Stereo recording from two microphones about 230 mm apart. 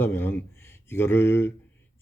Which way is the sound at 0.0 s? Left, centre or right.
Centre.